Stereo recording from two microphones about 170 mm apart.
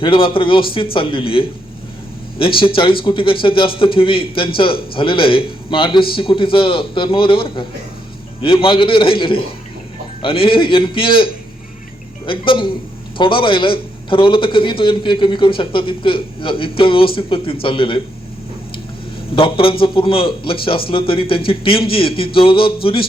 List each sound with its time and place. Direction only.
0.0 s a man's voice: 30° left (ahead or behind)
2.6 s a man's voice: 30° left (ahead or behind)
19.4 s a man's voice: 30° left (ahead or behind)